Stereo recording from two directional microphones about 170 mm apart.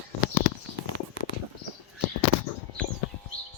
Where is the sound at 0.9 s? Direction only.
90° right.